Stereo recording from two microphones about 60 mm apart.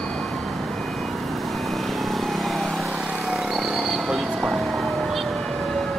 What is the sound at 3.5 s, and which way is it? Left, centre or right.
Music, centre.